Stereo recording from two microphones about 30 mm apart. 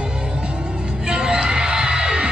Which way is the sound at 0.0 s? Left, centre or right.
Right.